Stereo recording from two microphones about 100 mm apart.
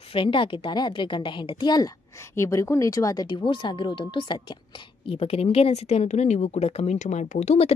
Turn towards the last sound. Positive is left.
turn(degrees=85)